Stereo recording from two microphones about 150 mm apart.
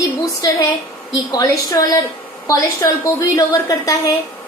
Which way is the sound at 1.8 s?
20° left (ahead or behind).